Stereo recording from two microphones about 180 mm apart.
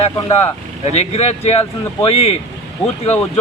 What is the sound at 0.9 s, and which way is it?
Speech, 35° left (ahead or behind).